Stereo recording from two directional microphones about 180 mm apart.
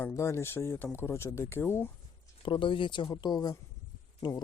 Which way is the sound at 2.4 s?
30° left (ahead or behind).